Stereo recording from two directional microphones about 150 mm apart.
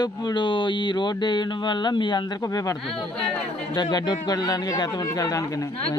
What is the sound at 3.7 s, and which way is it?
Speech, 25° left (ahead or behind).